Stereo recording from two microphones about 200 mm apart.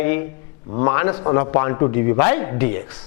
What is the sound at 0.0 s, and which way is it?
Speech, 15° left (ahead or behind).